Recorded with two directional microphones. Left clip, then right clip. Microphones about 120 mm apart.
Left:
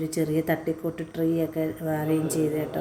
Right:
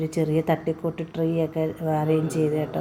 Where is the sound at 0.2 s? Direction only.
15° right (ahead or behind).